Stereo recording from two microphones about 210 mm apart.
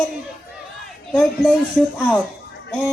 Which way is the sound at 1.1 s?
5° left (ahead or behind).